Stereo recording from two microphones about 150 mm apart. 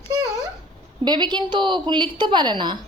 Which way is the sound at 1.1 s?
30° right (ahead or behind).